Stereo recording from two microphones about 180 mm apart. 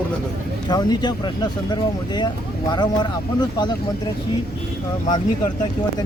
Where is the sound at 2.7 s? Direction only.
25° left (ahead or behind).